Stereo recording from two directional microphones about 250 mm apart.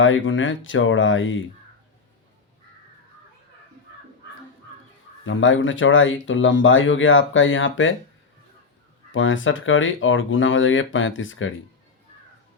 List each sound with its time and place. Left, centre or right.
0.0 s speech: left
5.2 s speech: left
9.1 s speech: left